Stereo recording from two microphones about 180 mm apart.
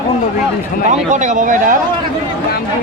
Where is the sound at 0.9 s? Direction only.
45° right (ahead or behind).